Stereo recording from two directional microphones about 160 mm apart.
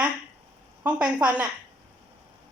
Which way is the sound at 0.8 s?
10° right (ahead or behind).